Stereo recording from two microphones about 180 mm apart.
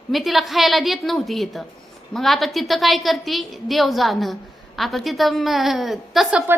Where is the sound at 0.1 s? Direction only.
Centre (ahead or behind).